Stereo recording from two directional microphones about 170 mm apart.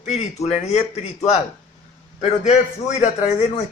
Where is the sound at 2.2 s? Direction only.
45° left (ahead or behind).